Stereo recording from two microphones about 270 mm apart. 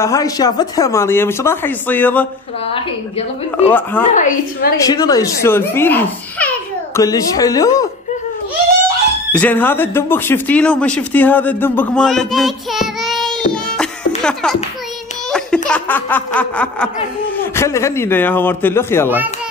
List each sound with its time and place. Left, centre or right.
0.0 s speech: centre
3.6 s speech: centre
4.1 s a woman's voice: left
4.8 s speech: centre
9.3 s speech: centre
15.3 s a sound: centre
17.4 s speech: centre
19.0 s a child's voice: centre